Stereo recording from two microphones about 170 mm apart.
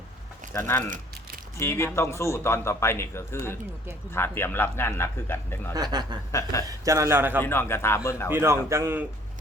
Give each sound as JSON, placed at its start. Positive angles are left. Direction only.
{"t": 0.5, "sound": "a man's voice", "side_deg": 15}
{"t": 5.7, "sound": "speech", "side_deg": -25}
{"t": 6.3, "sound": "a man's voice", "side_deg": 20}
{"t": 6.7, "sound": "a man's voice", "side_deg": -20}
{"t": 7.4, "sound": "a man's voice", "side_deg": 15}
{"t": 8.3, "sound": "a man's voice", "side_deg": -15}